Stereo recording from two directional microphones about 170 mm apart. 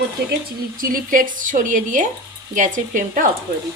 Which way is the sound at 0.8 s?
55° right (ahead or behind).